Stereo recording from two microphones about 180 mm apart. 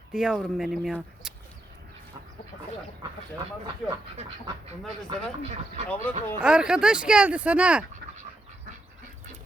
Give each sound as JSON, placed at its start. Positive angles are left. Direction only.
{"t": 0.1, "sound": "speech", "side_deg": -5}
{"t": 1.2, "sound": "bird", "side_deg": -5}
{"t": 5.0, "sound": "speech", "side_deg": -30}
{"t": 5.9, "sound": "speech", "side_deg": 10}
{"t": 6.4, "sound": "speech", "side_deg": -5}